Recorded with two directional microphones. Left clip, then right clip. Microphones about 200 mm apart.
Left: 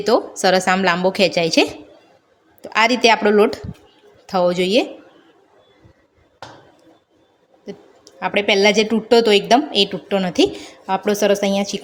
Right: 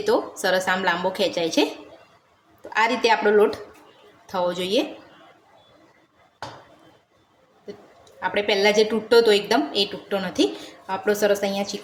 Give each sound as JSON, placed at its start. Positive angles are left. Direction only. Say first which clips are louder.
{"t": 0.0, "sound": "a woman's voice", "louder": "left 6 dB", "side_deg": 45}
{"t": 2.6, "sound": "a woman's voice", "louder": "left 5 dB", "side_deg": 45}
{"t": 8.2, "sound": "a woman's voice", "louder": "left 5 dB", "side_deg": 45}